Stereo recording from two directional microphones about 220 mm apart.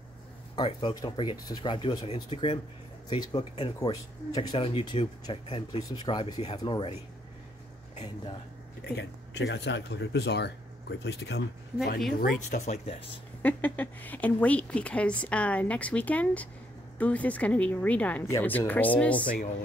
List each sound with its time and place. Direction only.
0.6 s speech: 20° left (ahead or behind)
8.8 s speech: 50° left (ahead or behind); by 13.0 s 30° left (ahead or behind)
13.4 s speech: 10° left (ahead or behind)